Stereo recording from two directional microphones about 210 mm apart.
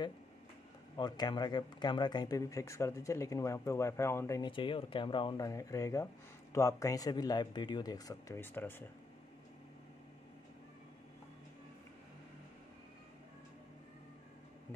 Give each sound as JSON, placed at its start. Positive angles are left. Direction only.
{"t": 0.9, "sound": "speech", "side_deg": 20}